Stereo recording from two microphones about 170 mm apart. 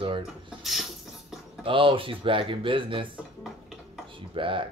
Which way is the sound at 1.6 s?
30° right (ahead or behind).